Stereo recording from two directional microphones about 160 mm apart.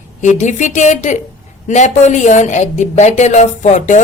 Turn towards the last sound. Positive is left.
turn(degrees=50)  # may be behind; listen again after turning